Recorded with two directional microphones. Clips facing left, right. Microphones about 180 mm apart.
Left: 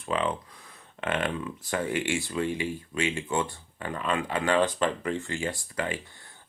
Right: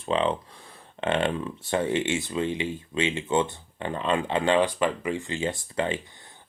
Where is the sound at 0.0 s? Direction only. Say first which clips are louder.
Right 4 dB; 25° right (ahead or behind).